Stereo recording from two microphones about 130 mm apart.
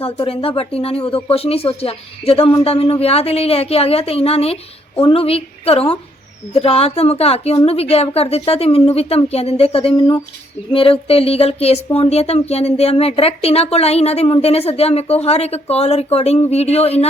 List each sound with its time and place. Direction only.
0.0 s speech: 45° left (ahead or behind)